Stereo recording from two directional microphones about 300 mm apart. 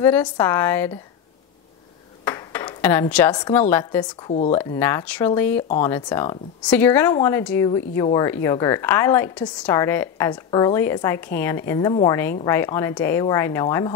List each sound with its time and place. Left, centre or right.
0.0 s speech: centre
2.2 s speech: centre
4.3 s speech: left
4.6 s speech: centre